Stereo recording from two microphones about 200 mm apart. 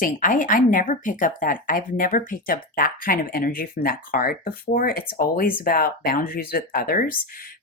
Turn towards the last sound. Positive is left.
turn(degrees=50)  # may be behind; listen again after turning